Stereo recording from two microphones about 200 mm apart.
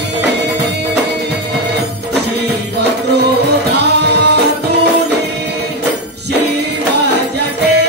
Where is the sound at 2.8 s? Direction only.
55° right (ahead or behind).